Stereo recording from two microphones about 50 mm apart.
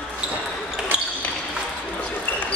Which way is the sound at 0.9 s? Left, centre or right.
Right.